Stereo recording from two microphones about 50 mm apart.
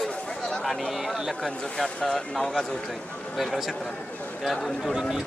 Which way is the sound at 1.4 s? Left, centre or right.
Centre.